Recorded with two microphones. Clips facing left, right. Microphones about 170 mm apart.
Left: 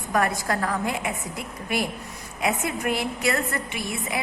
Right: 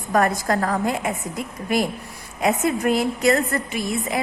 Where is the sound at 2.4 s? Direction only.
40° right (ahead or behind).